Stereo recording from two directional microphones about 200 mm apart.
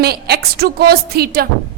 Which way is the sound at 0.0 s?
50° right (ahead or behind).